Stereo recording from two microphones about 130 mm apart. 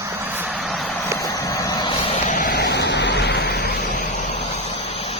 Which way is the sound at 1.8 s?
45° left (ahead or behind).